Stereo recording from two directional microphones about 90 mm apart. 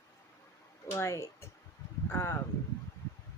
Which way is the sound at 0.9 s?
35° left (ahead or behind).